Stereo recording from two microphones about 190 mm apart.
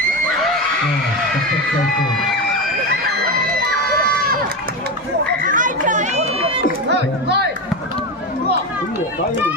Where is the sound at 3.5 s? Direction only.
50° right (ahead or behind).